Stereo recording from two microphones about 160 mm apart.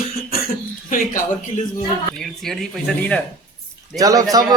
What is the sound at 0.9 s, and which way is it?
Speech, 55° left (ahead or behind).